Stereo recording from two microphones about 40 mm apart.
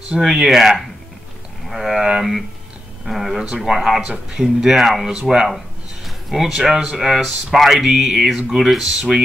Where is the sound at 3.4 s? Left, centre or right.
Centre.